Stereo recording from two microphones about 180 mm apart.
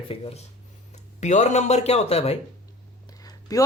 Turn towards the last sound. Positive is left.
turn(degrees=20)  # may be behind; listen again after turning